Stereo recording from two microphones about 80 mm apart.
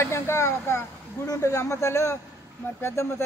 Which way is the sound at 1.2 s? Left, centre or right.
Left.